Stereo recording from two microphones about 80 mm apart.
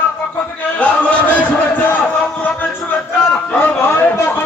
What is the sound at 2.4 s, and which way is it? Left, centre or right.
Music, left.